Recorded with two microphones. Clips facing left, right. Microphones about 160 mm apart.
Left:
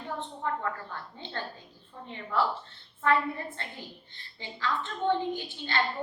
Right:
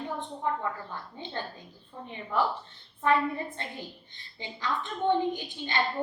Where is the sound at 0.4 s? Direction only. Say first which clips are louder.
Right 1 dB; 15° right (ahead or behind).